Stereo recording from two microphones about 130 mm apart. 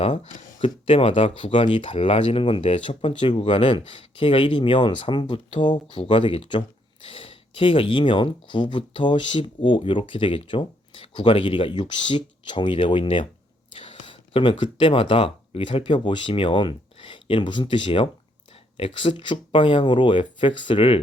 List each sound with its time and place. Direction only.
0.0 s speech: 45° left (ahead or behind)